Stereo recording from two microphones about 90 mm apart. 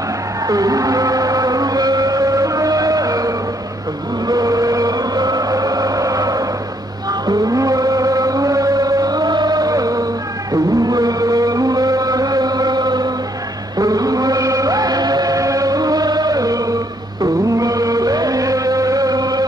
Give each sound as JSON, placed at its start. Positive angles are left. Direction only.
{"t": 0.5, "sound": "a sound", "side_deg": -40}
{"t": 7.1, "sound": "chant", "side_deg": -45}
{"t": 10.5, "sound": "music", "side_deg": -45}
{"t": 13.7, "sound": "chant", "side_deg": -45}